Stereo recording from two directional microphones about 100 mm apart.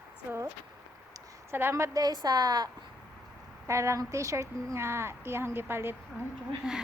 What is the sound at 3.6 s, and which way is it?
A woman's voice, 30° right (ahead or behind).